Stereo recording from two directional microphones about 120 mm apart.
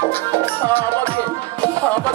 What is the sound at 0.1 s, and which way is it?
Music, 15° left (ahead or behind).